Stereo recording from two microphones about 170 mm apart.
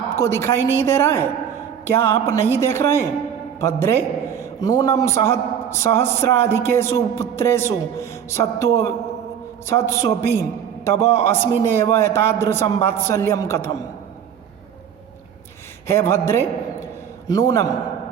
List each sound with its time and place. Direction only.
0.2 s a man's voice: 15° left (ahead or behind)
15.9 s a man's voice: 15° left (ahead or behind)
16.8 s a sound: 20° left (ahead or behind)